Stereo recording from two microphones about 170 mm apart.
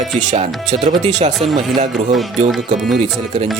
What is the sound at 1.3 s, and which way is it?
Speech, centre (ahead or behind).